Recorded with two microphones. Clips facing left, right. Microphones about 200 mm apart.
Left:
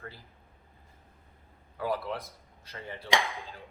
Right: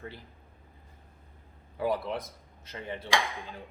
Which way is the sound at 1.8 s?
20° right (ahead or behind).